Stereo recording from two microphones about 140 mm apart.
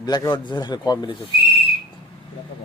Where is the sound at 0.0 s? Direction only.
30° left (ahead or behind).